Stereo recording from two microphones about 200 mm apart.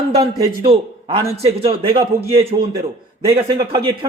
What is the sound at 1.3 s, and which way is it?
A man's voice, 30° right (ahead or behind).